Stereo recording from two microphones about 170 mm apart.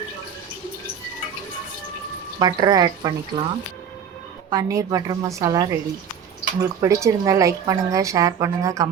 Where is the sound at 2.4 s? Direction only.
25° right (ahead or behind).